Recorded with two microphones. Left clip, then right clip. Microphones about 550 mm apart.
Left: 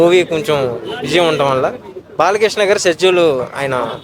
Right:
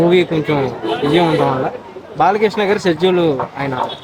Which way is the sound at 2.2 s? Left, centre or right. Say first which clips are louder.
Left 1 dB; left.